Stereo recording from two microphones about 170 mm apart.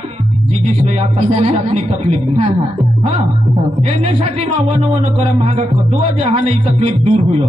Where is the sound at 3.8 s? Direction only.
40° right (ahead or behind).